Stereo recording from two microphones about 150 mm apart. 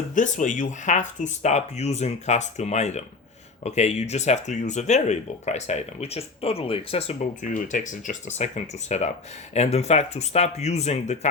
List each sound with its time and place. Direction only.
0.1 s speech: 60° left (ahead or behind); by 7.3 s 40° left (ahead or behind)
7.4 s speech: 60° left (ahead or behind)